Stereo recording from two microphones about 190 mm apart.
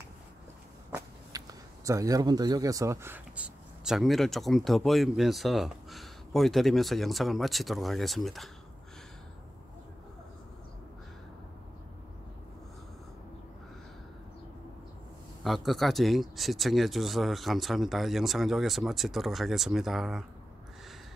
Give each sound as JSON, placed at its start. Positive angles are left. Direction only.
{"t": 0.9, "sound": "speech", "side_deg": -20}
{"t": 15.4, "sound": "speech", "side_deg": 0}